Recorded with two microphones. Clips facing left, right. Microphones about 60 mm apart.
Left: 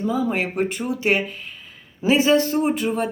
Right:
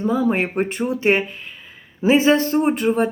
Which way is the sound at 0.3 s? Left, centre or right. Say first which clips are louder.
Right 3 dB; right.